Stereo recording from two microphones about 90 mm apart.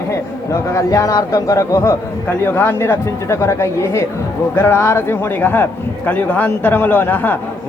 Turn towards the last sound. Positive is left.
turn(degrees=20)  # may be behind; listen again after turning